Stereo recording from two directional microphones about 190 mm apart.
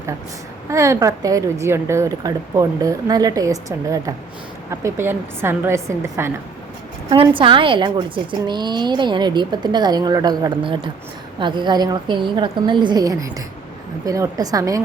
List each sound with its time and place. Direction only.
0.7 s a woman's voice: 15° right (ahead or behind)
7.1 s a woman's voice: 25° right (ahead or behind)